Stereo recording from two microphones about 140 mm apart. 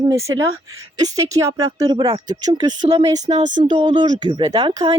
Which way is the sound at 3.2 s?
60° right (ahead or behind).